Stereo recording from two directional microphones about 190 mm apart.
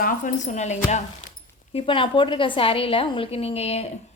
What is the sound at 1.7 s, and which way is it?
A woman's voice, 25° left (ahead or behind).